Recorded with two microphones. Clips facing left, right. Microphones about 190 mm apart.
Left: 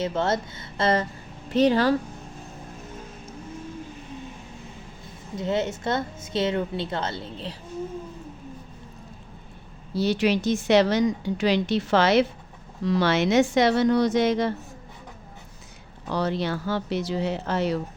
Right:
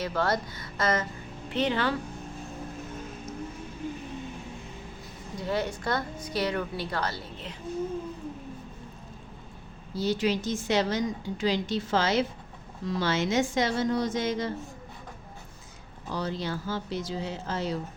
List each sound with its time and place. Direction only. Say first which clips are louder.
0.0 s a woman's voice: left 3 dB; 25° left (ahead or behind); by 2.0 s 40° left (ahead or behind)
5.4 s a woman's voice: left 4 dB; 25° left (ahead or behind)
9.9 s a woman's voice: left 4 dB; 70° left (ahead or behind)
16.0 s a woman's voice: left 6 dB; 70° left (ahead or behind)